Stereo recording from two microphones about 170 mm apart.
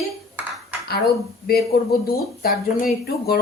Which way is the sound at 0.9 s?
65° left (ahead or behind).